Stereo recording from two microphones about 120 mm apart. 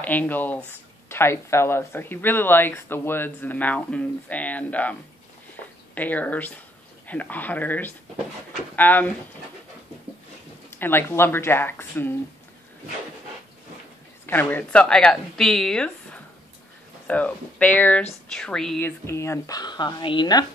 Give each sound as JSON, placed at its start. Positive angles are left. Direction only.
{"t": 0.0, "sound": "speech", "side_deg": 15}
{"t": 5.9, "sound": "speech", "side_deg": 15}
{"t": 10.7, "sound": "speech", "side_deg": 20}
{"t": 14.2, "sound": "speech", "side_deg": 15}
{"t": 18.8, "sound": "speech", "side_deg": 20}